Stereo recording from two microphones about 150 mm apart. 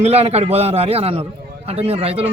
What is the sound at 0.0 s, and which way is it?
A man's voice, 45° right (ahead or behind).